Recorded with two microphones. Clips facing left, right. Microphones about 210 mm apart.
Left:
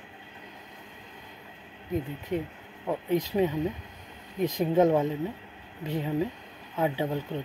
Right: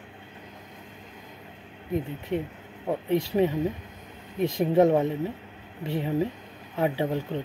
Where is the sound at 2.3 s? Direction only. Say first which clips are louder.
Right 1 dB; 20° right (ahead or behind).